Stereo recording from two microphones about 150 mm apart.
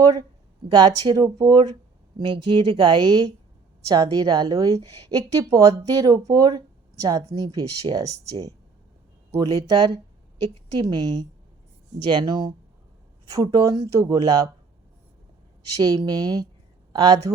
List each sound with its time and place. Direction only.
0.0 s a woman's voice: 25° right (ahead or behind)
16.0 s a woman's voice: 25° right (ahead or behind)